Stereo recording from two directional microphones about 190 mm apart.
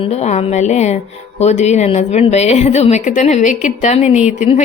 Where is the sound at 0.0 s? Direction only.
35° left (ahead or behind).